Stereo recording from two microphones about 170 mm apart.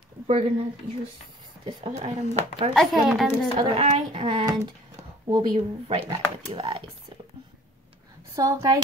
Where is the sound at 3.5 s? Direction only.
35° right (ahead or behind).